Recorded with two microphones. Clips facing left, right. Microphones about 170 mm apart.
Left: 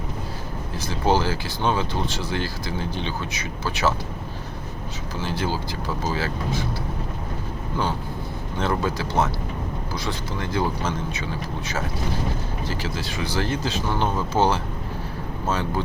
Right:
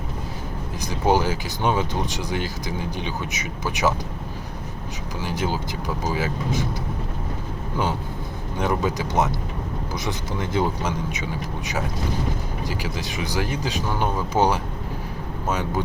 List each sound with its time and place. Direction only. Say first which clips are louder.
0.8 s speech: right 1 dB; 15° right (ahead or behind)
5.2 s speech: right 1 dB; 20° right (ahead or behind)
8.5 s speech: right 1 dB; 15° right (ahead or behind)